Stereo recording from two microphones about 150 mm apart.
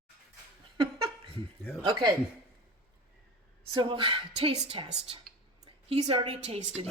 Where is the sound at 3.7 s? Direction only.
35° right (ahead or behind).